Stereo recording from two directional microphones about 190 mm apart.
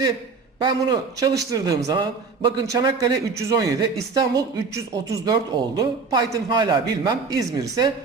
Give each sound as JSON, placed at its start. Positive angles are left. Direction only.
{"t": 0.6, "sound": "speech", "side_deg": -20}